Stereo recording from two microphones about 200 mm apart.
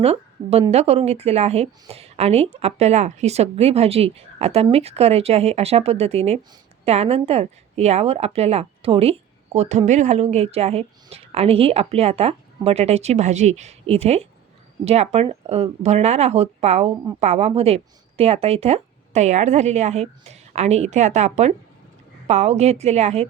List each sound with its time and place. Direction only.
0.0 s a woman's voice: 30° right (ahead or behind)